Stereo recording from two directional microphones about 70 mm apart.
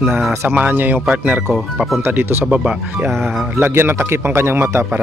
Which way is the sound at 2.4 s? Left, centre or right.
Centre.